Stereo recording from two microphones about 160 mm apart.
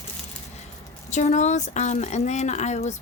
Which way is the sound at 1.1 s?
50° left (ahead or behind).